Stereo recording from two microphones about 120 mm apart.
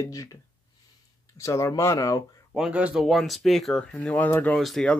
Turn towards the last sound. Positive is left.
turn(degrees=0)  # may be behind; listen again after turning